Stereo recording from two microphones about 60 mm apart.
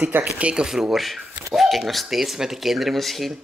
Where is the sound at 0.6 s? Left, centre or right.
Centre.